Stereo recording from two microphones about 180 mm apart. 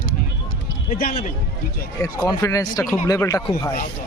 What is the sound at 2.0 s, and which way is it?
Speech, 20° left (ahead or behind).